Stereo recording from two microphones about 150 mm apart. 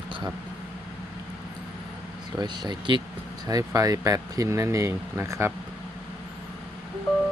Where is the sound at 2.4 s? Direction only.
30° right (ahead or behind).